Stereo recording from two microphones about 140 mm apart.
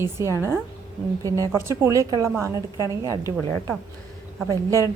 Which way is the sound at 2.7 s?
25° left (ahead or behind).